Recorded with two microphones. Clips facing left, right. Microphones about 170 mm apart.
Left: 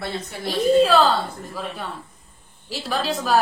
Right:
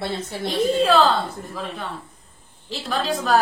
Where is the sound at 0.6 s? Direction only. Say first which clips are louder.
Left 3 dB; centre (ahead or behind).